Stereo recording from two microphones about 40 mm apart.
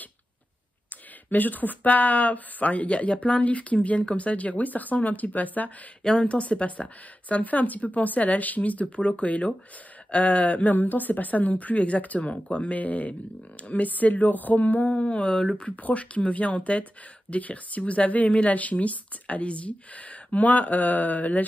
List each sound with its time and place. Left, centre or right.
1.3 s speech: left
6.1 s a woman's voice: left